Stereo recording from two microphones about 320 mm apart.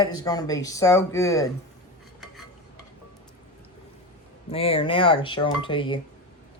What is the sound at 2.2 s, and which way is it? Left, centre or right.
Stir, centre.